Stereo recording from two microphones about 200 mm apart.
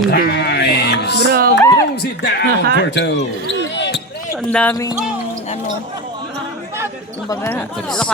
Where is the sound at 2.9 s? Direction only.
60° left (ahead or behind).